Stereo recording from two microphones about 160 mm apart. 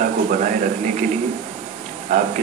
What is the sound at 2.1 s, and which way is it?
Speech, 55° right (ahead or behind).